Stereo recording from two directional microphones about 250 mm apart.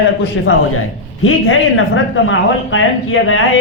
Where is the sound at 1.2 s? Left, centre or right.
Left.